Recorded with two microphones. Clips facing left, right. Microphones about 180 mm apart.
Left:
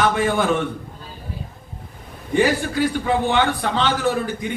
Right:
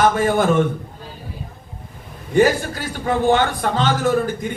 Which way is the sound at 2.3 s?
45° right (ahead or behind).